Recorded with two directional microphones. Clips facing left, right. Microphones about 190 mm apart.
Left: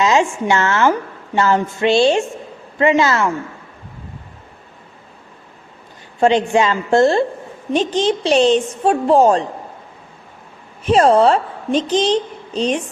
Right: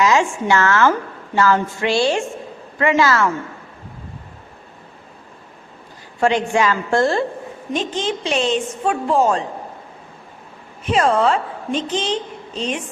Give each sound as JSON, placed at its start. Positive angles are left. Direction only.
{"t": 0.0, "sound": "a woman's voice", "side_deg": 20}
{"t": 6.1, "sound": "a woman's voice", "side_deg": 20}
{"t": 10.8, "sound": "a woman's voice", "side_deg": 35}